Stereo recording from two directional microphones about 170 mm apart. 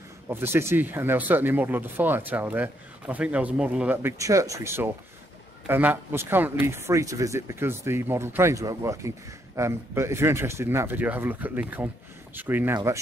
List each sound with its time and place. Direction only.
0.3 s speech: 15° right (ahead or behind)